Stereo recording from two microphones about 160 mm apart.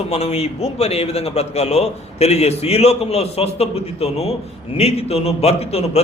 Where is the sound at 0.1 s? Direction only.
40° left (ahead or behind).